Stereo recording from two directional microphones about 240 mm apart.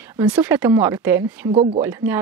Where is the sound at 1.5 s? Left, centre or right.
Right.